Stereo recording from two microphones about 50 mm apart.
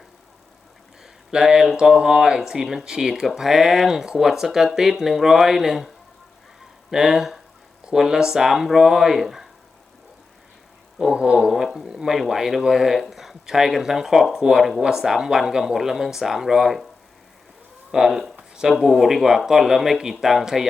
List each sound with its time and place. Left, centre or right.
1.3 s speech: centre
6.9 s speech: centre
11.1 s speech: centre
11.9 s speech: centre
12.1 s speech: centre
17.9 s speech: centre